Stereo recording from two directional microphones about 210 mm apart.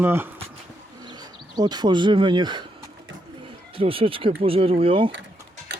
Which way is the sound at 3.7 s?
25° right (ahead or behind).